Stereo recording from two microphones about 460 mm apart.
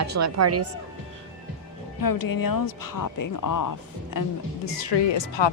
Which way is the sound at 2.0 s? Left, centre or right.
Left.